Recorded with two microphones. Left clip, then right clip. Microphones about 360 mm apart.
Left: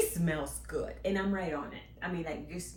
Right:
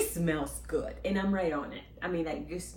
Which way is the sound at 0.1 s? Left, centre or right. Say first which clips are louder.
Right 3 dB; centre.